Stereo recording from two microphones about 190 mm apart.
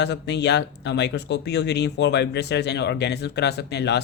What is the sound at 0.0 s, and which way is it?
Speech, 65° left (ahead or behind).